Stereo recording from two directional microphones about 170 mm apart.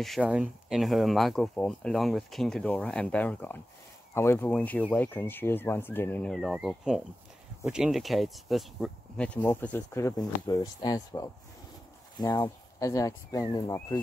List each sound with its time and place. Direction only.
0.0 s speech: centre (ahead or behind); by 13.7 s 20° left (ahead or behind)